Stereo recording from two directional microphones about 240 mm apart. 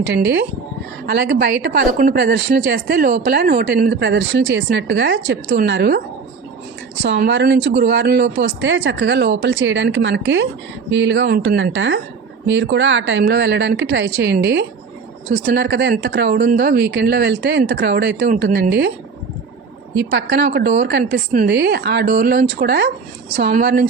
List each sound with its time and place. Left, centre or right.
0.0 s speech: right
4.0 s speech: right
7.0 s speech: right
20.0 s speech: right